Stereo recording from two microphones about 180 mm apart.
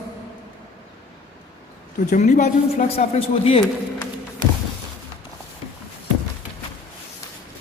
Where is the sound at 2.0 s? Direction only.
40° left (ahead or behind).